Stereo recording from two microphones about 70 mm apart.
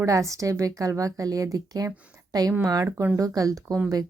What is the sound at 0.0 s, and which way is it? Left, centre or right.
A woman's voice, right.